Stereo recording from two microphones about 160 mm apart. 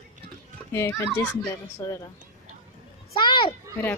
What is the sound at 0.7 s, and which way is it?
A woman's voice, 15° left (ahead or behind).